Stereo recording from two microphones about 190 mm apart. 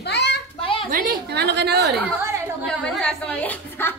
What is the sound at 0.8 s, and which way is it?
A woman's voice, 50° right (ahead or behind).